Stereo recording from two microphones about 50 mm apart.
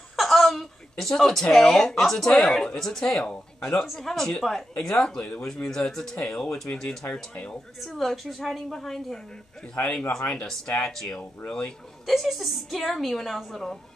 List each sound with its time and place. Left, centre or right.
0.1 s a woman's voice: centre
9.8 s a man's voice: left
12.1 s a woman's voice: centre